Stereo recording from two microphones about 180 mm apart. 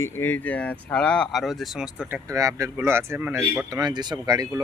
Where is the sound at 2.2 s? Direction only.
20° right (ahead or behind).